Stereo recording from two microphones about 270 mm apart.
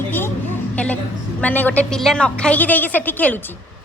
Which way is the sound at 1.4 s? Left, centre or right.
Centre.